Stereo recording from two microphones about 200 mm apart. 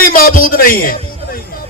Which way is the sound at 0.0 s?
45° left (ahead or behind).